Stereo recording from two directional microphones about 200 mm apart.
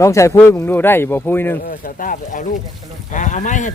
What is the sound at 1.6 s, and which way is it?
Speech, 45° left (ahead or behind).